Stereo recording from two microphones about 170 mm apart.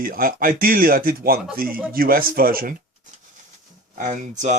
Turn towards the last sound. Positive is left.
turn(degrees=-45)  # may be behind; listen again after turning